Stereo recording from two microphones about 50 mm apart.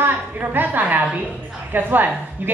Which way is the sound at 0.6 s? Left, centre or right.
Right.